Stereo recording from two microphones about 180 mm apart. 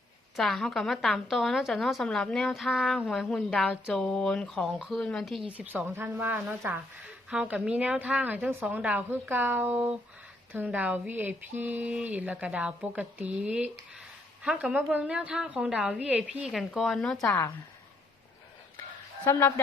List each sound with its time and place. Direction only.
0.3 s a woman's voice: centre (ahead or behind)
17.2 s speech: 15° left (ahead or behind)
19.2 s speech: 15° left (ahead or behind)